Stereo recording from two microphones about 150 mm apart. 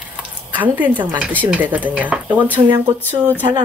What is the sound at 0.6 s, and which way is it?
Speech, 10° right (ahead or behind).